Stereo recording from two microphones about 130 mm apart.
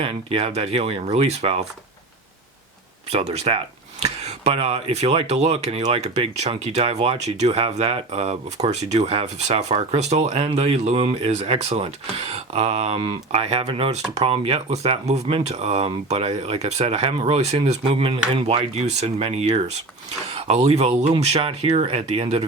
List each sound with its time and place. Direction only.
0.0 s speech: 50° right (ahead or behind)
3.1 s speech: 55° right (ahead or behind)